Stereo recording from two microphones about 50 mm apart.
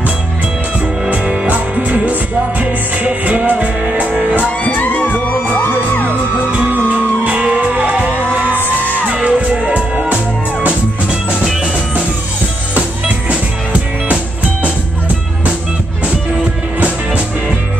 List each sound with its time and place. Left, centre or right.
1.1 s music: right
4.6 s music: left
7.2 s music: right
7.7 s music: right
16.8 s music: right